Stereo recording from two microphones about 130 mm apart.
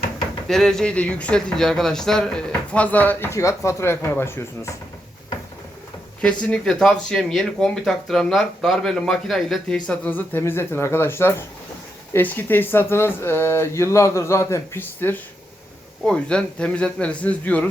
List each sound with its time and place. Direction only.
0.4 s speech: 5° left (ahead or behind)
6.2 s speech: 10° left (ahead or behind)
16.0 s speech: 5° left (ahead or behind)